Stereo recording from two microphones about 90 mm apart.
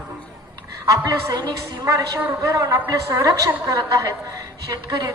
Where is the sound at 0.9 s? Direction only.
35° right (ahead or behind).